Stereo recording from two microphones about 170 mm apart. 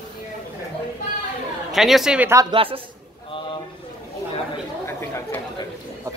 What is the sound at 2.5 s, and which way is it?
Speech, 30° right (ahead or behind).